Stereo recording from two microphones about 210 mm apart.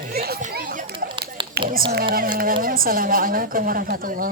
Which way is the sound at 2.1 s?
45° right (ahead or behind).